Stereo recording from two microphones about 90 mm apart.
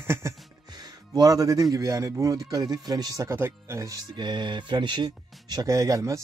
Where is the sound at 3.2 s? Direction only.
30° right (ahead or behind); by 5.6 s 55° right (ahead or behind).